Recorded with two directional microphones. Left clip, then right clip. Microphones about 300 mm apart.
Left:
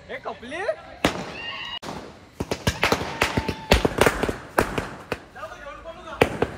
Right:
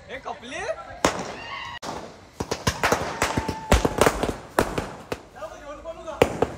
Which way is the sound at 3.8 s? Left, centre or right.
Centre.